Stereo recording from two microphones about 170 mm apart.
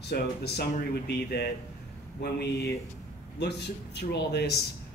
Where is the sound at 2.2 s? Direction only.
80° left.